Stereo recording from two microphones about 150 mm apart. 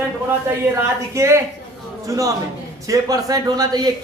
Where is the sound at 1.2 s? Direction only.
20° right (ahead or behind).